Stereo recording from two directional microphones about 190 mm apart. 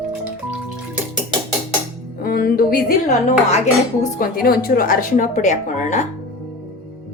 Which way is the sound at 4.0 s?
50° left (ahead or behind).